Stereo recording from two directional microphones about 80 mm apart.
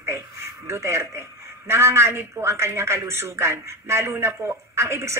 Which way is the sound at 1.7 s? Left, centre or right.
Right.